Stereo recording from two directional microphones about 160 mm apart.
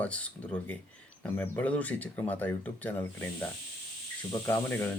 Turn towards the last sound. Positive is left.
turn(degrees=15)  # may be behind; listen again after turning